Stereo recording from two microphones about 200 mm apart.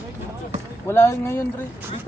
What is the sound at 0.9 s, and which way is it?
Speech, 10° left (ahead or behind).